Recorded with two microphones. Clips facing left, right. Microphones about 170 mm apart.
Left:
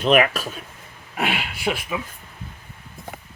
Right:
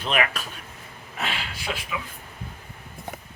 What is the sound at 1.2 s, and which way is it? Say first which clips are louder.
Speech: left 6 dB; 60° left (ahead or behind).